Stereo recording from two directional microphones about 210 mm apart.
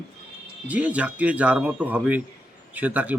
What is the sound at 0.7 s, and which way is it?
Speech, 5° right (ahead or behind).